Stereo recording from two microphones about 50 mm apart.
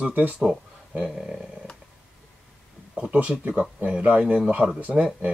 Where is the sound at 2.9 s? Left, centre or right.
Right.